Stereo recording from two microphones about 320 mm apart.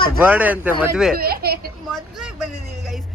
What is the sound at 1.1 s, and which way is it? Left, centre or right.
Speech, right.